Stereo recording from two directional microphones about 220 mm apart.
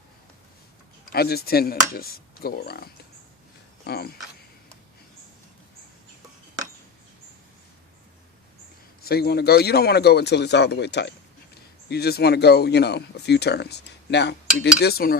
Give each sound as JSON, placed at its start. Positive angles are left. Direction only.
{"t": 1.1, "sound": "speech", "side_deg": 45}
{"t": 9.0, "sound": "speech", "side_deg": 45}